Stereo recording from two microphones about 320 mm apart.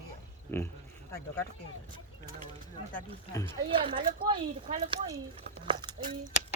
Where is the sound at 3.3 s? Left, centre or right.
Centre.